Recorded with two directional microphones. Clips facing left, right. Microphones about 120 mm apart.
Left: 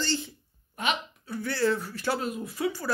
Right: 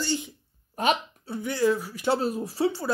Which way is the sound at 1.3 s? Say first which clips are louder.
Right 3 dB; 20° right (ahead or behind).